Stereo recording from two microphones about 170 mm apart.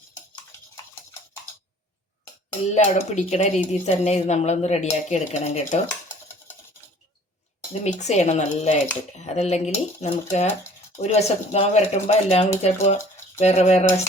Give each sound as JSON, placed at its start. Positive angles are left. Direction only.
{"t": 2.7, "sound": "speech", "side_deg": 45}
{"t": 7.7, "sound": "speech", "side_deg": 40}